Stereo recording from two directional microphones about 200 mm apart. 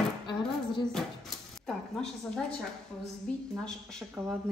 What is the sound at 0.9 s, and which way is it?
Speech, centre (ahead or behind).